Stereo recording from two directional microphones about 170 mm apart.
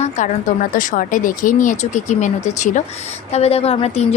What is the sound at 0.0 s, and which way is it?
Speech, 45° left (ahead or behind).